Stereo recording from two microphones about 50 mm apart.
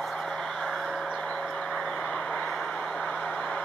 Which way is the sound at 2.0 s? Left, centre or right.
Left.